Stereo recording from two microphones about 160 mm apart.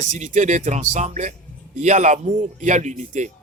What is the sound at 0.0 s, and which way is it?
Speech, 50° right (ahead or behind).